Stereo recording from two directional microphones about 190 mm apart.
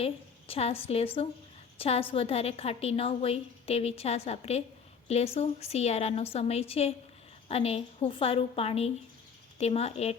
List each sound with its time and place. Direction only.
0.0 s a woman's voice: 30° left (ahead or behind)